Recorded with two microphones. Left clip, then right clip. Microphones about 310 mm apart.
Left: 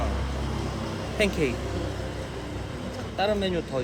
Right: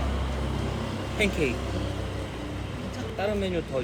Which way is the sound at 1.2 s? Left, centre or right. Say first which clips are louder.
Left 1 dB; left.